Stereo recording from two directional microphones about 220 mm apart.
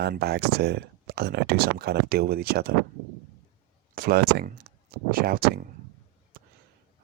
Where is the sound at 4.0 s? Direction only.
45° right (ahead or behind).